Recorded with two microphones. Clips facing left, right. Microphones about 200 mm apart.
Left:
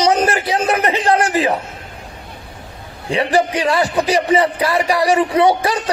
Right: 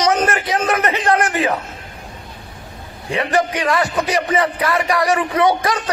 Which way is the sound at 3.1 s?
30° left (ahead or behind).